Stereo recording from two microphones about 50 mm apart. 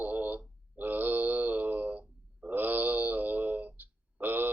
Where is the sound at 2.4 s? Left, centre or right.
Right.